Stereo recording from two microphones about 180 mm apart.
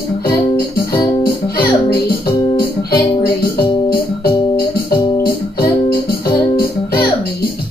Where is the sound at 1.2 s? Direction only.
60° left (ahead or behind).